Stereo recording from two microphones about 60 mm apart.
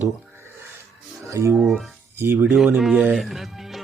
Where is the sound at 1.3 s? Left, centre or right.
Right.